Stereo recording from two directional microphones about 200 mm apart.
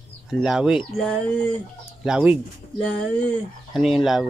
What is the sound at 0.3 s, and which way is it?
Speech, 5° right (ahead or behind).